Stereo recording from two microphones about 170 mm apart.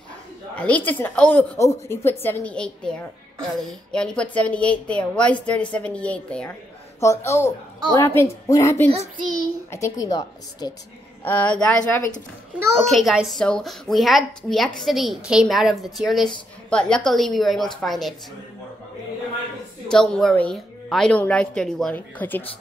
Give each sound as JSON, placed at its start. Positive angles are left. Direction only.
{"t": 0.6, "sound": "a woman's voice", "side_deg": 10}
{"t": 11.2, "sound": "a woman's voice", "side_deg": 10}
{"t": 19.9, "sound": "a woman's voice", "side_deg": 0}